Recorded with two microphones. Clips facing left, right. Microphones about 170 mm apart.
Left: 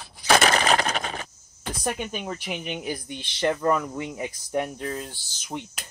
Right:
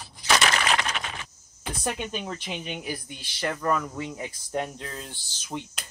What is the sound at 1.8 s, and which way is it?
Speech, 15° left (ahead or behind).